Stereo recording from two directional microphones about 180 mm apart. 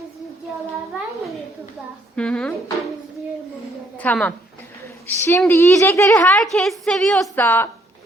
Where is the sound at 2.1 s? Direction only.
5° left (ahead or behind).